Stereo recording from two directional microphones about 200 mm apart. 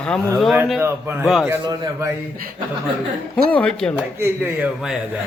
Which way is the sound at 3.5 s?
5° left (ahead or behind).